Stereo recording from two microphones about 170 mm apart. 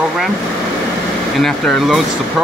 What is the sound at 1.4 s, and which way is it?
Speech, centre (ahead or behind).